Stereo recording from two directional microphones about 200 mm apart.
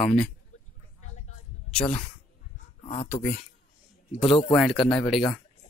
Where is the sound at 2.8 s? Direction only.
30° left (ahead or behind).